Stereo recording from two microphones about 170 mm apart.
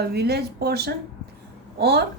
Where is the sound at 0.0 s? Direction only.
70° right (ahead or behind).